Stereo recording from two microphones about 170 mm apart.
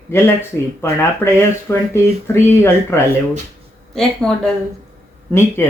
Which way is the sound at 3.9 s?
5° left (ahead or behind).